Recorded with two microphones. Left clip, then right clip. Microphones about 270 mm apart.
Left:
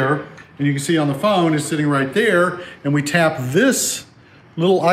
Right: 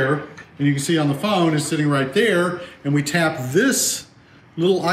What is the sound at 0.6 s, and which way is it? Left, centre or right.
A man's voice, centre.